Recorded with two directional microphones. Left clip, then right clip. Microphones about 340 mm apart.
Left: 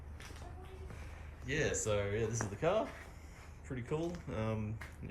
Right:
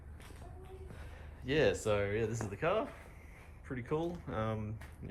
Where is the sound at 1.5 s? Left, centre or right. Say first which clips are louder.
Right 4 dB; centre.